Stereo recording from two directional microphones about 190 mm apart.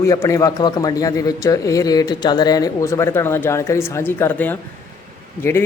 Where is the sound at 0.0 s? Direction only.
15° left (ahead or behind).